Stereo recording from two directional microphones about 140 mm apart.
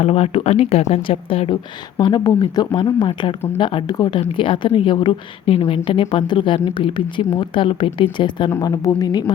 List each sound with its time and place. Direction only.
0.0 s a woman's voice: 45° left (ahead or behind); by 9.3 s 30° left (ahead or behind)